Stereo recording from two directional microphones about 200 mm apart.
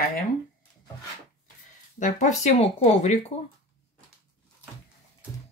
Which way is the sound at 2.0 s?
35° left (ahead or behind).